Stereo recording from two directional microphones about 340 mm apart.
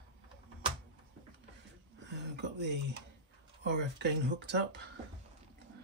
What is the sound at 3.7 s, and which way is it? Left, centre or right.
Speech, right.